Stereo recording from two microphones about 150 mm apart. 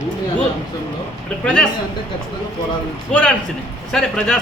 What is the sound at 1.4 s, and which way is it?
Speech, 5° left (ahead or behind).